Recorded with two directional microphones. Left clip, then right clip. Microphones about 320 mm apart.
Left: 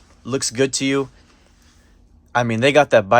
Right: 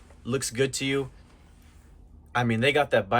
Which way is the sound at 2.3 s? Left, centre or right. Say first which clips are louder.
Left 8 dB; centre.